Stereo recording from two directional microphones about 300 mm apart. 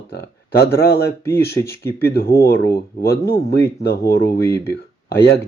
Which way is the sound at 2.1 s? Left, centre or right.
Left.